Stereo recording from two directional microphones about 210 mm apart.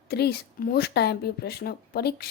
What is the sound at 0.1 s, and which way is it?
A woman's voice, 50° left (ahead or behind).